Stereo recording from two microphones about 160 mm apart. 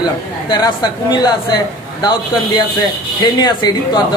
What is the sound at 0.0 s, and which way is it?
Speech, 25° left (ahead or behind).